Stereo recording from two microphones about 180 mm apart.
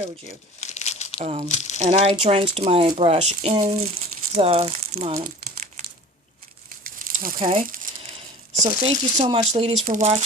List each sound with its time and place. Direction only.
0.6 s crumpling: 40° left (ahead or behind)
1.2 s speech: 35° right (ahead or behind)
1.5 s speech: 40° left (ahead or behind)
1.8 s speech: 35° right (ahead or behind)
6.8 s a sound: 50° right (ahead or behind)
8.6 s speech: 35° right (ahead or behind)
9.8 s speech: 45° right (ahead or behind)